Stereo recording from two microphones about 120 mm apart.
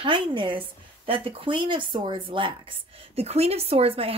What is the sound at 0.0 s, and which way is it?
A woman's voice, 45° right (ahead or behind).